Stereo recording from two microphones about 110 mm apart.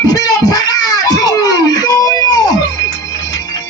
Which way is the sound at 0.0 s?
35° left (ahead or behind).